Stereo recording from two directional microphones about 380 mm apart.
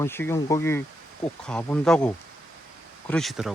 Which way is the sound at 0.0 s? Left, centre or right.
Centre.